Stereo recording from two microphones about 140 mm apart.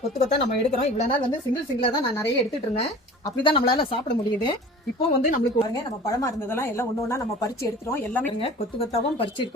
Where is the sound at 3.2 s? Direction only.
30° left (ahead or behind).